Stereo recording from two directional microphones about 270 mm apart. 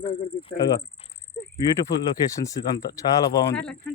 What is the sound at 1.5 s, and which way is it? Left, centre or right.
Speech, centre.